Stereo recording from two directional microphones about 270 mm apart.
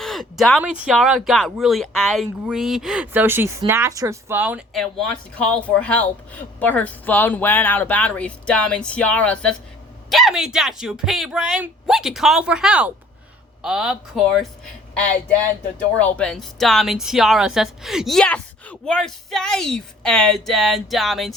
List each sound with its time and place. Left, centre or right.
0.0 s speech: centre
16.0 s speech: centre